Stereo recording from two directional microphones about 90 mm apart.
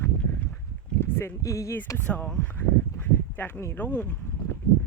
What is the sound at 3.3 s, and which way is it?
Speech, 20° left (ahead or behind).